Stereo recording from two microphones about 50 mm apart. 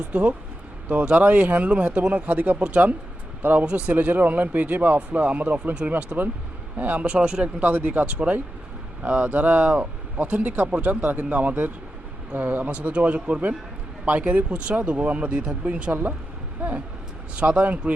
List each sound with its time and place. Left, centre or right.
0.1 s speech: right
2.3 s speech: right
3.7 s speech: right
3.9 s speech: right; by 7.4 s centre
7.4 s speech: right
12.7 s speech: right
15.9 s speech: right
16.6 s vehicle: right
17.3 s speech: right